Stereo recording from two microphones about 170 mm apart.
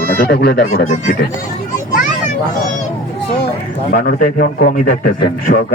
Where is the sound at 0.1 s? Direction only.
60° left (ahead or behind).